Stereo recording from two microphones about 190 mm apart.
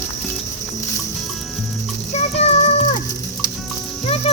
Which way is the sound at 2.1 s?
35° left (ahead or behind).